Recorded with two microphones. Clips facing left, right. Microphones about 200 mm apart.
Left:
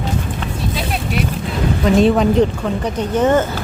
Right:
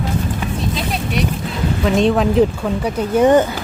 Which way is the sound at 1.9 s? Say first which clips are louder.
Left 2 dB; centre (ahead or behind).